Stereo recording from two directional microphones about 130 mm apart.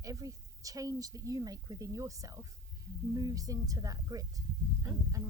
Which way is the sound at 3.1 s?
30° right (ahead or behind).